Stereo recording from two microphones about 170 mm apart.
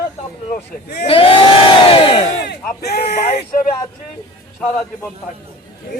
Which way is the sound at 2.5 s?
70° left (ahead or behind).